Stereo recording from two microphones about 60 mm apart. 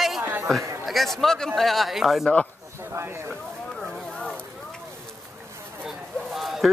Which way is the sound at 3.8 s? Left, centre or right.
Centre.